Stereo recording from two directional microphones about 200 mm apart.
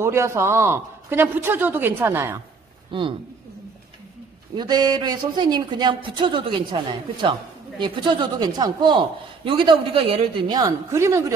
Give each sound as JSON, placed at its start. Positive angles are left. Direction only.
{"t": 0.0, "sound": "a man's voice", "side_deg": -15}
{"t": 2.9, "sound": "speech", "side_deg": -25}
{"t": 4.6, "sound": "a man's voice", "side_deg": -20}